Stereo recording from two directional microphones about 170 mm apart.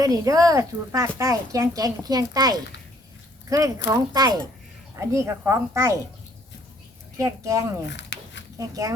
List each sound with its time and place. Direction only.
0.0 s speech: 20° right (ahead or behind)
7.2 s speech: 20° right (ahead or behind)
7.9 s a sound: 90° left
8.5 s speech: 20° right (ahead or behind)